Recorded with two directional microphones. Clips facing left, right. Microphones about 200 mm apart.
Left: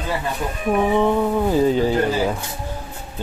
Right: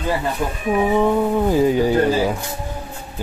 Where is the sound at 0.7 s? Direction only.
5° right (ahead or behind).